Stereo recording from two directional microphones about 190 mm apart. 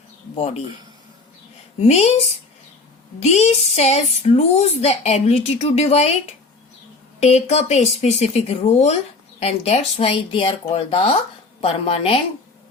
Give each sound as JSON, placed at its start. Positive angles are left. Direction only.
{"t": 0.3, "sound": "a woman's voice", "side_deg": 35}
{"t": 1.8, "sound": "a woman's voice", "side_deg": 35}
{"t": 3.2, "sound": "a woman's voice", "side_deg": 35}